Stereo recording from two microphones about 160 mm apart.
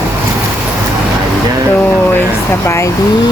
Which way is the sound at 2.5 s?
15° left (ahead or behind).